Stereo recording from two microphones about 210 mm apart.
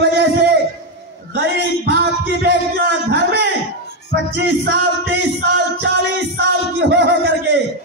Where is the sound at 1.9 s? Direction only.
50° right (ahead or behind).